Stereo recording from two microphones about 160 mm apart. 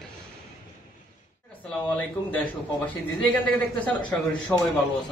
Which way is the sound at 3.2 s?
10° left (ahead or behind).